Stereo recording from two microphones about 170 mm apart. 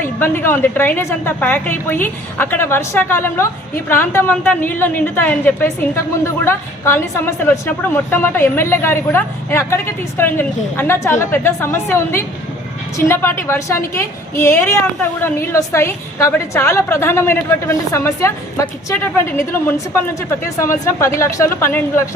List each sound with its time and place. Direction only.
0.0 s a woman's voice: 15° left (ahead or behind)
19.6 s a woman's voice: 15° left (ahead or behind)